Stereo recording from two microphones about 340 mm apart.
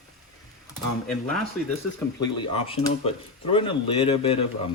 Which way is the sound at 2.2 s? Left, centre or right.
Centre.